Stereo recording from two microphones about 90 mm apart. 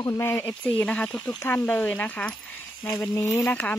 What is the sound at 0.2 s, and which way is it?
Speech, 25° left (ahead or behind).